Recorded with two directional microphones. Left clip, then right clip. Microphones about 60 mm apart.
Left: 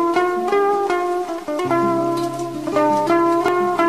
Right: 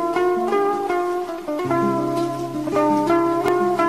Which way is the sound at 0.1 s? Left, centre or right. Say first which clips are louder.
Left 2 dB; right.